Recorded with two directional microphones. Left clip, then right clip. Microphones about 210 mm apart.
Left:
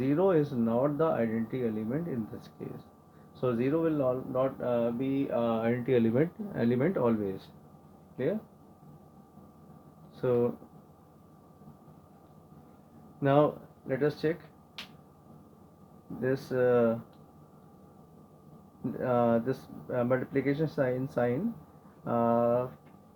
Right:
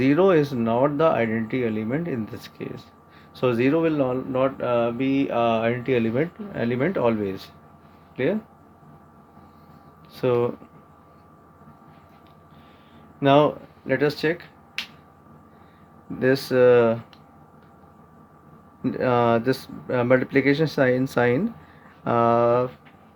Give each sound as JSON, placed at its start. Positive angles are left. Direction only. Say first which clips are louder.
{"t": 0.0, "sound": "speech", "louder": "right 8 dB", "side_deg": -40}
{"t": 5.8, "sound": "speech", "louder": "right 4 dB", "side_deg": -10}
{"t": 10.2, "sound": "speech", "louder": "right 6 dB", "side_deg": -30}
{"t": 13.1, "sound": "speech", "louder": "right 8 dB", "side_deg": -30}
{"t": 13.8, "sound": "speech", "louder": "right 7 dB", "side_deg": -45}
{"t": 16.2, "sound": "speech", "louder": "right 11 dB", "side_deg": -45}
{"t": 18.9, "sound": "speech", "louder": "right 7 dB", "side_deg": -45}